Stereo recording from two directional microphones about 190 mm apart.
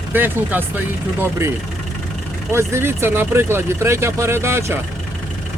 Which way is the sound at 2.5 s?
15° right (ahead or behind).